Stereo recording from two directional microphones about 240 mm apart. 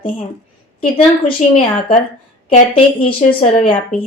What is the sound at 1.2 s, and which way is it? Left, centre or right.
A woman's voice, left.